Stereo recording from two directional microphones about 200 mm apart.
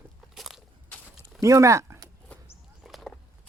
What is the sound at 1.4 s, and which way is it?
Speech, 15° right (ahead or behind).